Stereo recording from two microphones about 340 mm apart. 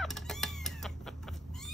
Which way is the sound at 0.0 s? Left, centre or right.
Centre.